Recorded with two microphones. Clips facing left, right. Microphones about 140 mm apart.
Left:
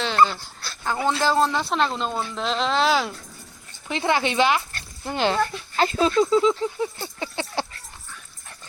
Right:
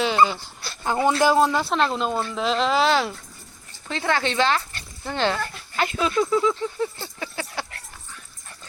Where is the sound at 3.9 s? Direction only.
15° left (ahead or behind).